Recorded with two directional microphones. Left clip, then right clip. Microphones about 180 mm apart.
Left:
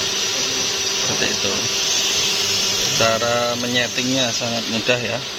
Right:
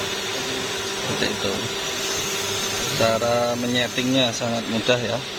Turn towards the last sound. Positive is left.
turn(degrees=0)  # may be behind; listen again after turning